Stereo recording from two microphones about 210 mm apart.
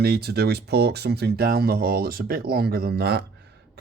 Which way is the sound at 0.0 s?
50° right (ahead or behind).